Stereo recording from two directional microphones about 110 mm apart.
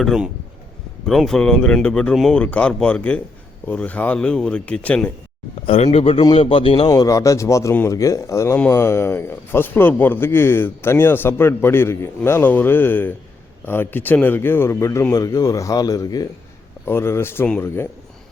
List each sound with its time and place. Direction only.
0.0 s speech: 5° right (ahead or behind); by 5.1 s 15° left (ahead or behind)
5.6 s speech: 70° left (ahead or behind)
6.8 s speech: 35° left (ahead or behind)
16.8 s speech: 20° left (ahead or behind)